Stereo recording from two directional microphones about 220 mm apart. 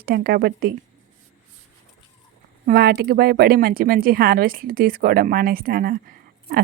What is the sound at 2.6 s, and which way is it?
Speech, 45° right (ahead or behind).